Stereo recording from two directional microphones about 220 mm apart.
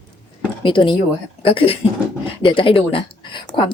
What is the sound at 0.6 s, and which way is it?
A woman's voice, 20° left (ahead or behind).